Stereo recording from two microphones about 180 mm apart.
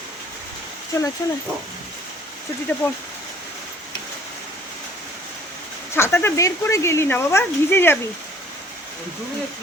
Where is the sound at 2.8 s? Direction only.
10° left (ahead or behind).